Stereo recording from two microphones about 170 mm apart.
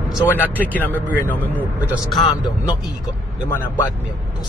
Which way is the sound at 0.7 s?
10° left (ahead or behind).